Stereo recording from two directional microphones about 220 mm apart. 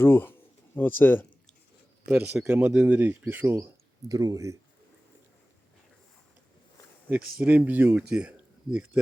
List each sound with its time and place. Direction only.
0.0 s speech: 10° left (ahead or behind)
2.0 s speech: 10° right (ahead or behind)
7.3 s speech: 5° right (ahead or behind)